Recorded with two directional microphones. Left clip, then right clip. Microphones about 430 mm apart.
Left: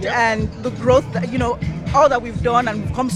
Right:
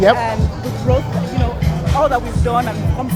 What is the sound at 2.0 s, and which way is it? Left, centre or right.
Speech, left.